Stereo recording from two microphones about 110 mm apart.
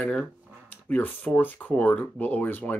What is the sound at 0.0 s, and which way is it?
Speech, 10° left (ahead or behind).